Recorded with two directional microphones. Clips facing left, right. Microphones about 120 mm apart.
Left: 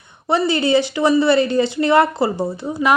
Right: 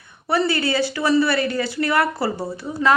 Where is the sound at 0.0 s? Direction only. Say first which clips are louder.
Left 2 dB; 20° left (ahead or behind).